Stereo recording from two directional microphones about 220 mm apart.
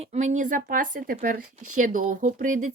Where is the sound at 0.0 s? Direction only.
30° right (ahead or behind).